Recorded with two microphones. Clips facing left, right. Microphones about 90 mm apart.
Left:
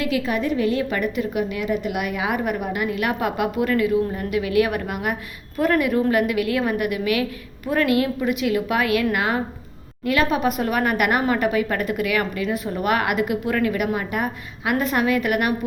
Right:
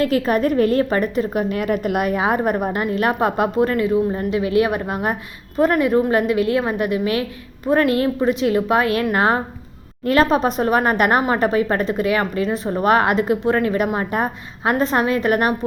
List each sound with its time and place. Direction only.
0.0 s a woman's voice: 45° right (ahead or behind)